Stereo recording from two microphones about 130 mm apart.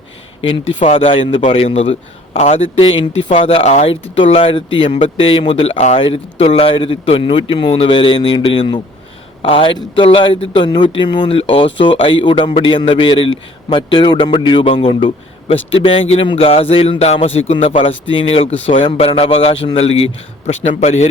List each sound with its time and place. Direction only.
0.4 s a man's voice: 45° left (ahead or behind)
4.1 s a man's voice: 50° left (ahead or behind)
20.5 s speech: 60° left (ahead or behind)